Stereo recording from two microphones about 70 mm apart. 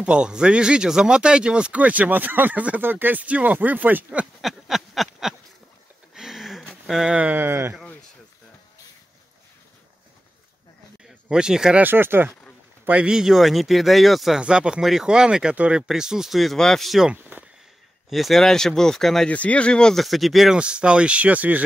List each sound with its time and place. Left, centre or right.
0.0 s speech: centre
4.4 s a sound: centre
6.9 s speech: centre
7.3 s speech: right
11.1 s speech: centre
11.8 s speech: right
12.8 s speech: centre
14.4 s speech: centre
17.2 s a sound: right
18.1 s speech: centre
19.3 s speech: centre
20.5 s speech: centre